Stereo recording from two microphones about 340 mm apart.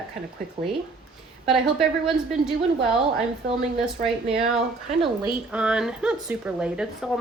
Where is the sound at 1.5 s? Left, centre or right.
Centre.